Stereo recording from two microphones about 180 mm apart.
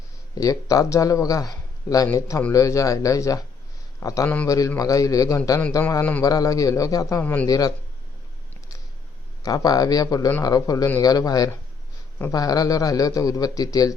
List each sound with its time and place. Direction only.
0.3 s a man's voice: 20° left (ahead or behind)
9.4 s a man's voice: 20° left (ahead or behind)